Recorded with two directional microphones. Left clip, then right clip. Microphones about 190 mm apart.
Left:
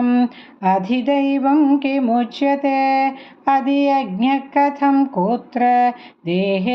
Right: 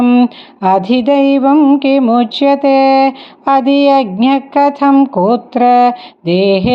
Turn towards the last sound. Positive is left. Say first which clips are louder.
# right 9 dB
turn(degrees=-40)  # may be behind; listen again after turning